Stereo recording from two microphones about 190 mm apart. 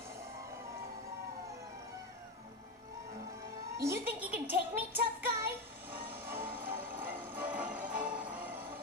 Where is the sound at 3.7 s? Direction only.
15° right (ahead or behind).